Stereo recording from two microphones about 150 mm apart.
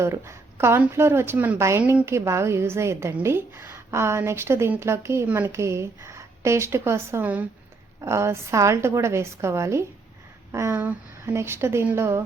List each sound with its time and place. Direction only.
0.0 s a woman's voice: 20° right (ahead or behind)